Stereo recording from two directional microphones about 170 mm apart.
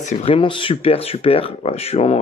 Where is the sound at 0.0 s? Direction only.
40° left (ahead or behind).